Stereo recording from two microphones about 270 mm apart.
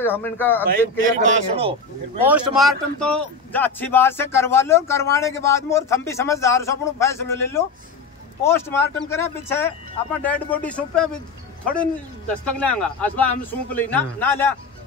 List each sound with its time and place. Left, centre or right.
0.0 s speech: centre
1.2 s a man's voice: right
2.2 s a man's voice: centre